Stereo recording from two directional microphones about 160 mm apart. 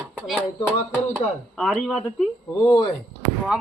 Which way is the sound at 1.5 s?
Centre (ahead or behind).